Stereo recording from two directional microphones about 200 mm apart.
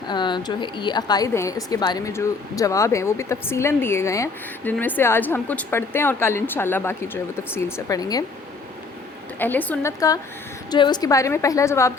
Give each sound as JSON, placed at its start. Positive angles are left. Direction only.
{"t": 0.1, "sound": "a woman's voice", "side_deg": 20}
{"t": 9.4, "sound": "a woman's voice", "side_deg": 10}